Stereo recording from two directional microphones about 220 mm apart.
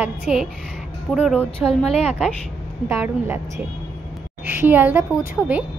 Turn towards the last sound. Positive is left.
turn(degrees=-5)  # may be behind; listen again after turning